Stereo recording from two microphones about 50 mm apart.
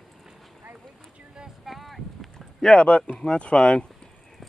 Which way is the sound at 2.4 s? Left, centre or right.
Centre.